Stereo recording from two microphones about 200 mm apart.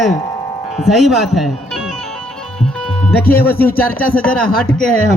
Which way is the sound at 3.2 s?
50° left (ahead or behind).